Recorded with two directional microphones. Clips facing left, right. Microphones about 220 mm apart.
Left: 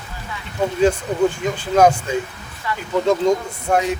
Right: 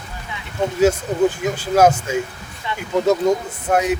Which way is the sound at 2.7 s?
25° right (ahead or behind).